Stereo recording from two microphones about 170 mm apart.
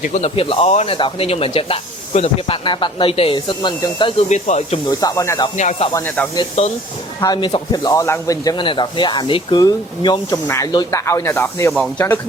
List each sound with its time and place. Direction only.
0.0 s speech: 40° left (ahead or behind); by 4.1 s 25° left (ahead or behind)
4.3 s speech: 40° left (ahead or behind)
4.9 s speech: 20° left (ahead or behind)
5.5 s speech: 45° left (ahead or behind)
5.9 s speech: 10° left (ahead or behind)
6.6 s speech: 40° left (ahead or behind)
7.2 s speech: 25° left (ahead or behind)